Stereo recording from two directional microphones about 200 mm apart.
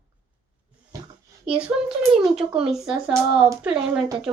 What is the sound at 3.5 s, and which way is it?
Speech, 5° right (ahead or behind).